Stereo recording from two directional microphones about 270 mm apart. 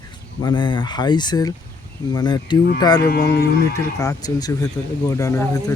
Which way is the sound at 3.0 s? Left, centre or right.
Left.